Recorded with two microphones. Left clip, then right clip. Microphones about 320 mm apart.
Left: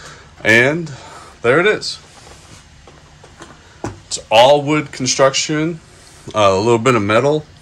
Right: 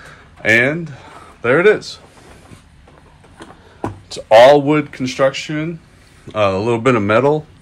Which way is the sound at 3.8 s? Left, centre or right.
Right.